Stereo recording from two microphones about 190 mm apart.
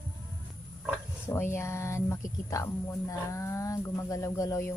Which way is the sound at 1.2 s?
15° left (ahead or behind).